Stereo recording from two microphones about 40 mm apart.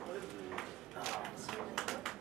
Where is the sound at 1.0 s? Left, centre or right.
Centre.